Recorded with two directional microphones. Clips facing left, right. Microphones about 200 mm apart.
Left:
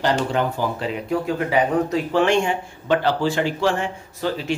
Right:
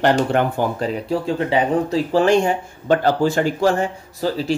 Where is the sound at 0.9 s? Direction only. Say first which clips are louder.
Right 2 dB; 35° right (ahead or behind).